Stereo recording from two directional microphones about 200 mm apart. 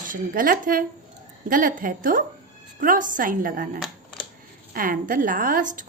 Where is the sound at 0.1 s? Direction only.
45° right (ahead or behind).